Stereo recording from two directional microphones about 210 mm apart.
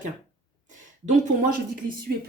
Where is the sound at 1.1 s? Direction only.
35° right (ahead or behind).